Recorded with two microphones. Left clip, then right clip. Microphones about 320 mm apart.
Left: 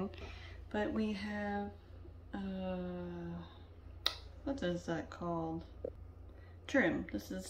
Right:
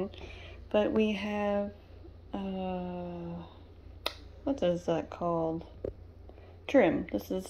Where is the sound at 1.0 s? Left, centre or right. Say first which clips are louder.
Right 9 dB; centre.